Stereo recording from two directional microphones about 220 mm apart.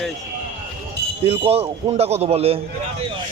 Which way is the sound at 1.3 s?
25° right (ahead or behind).